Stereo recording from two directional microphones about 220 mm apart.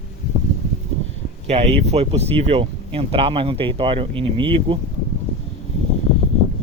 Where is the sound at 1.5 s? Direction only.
30° right (ahead or behind).